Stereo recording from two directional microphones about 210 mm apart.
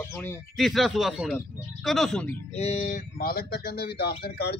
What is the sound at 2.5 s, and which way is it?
Speech, 30° left (ahead or behind).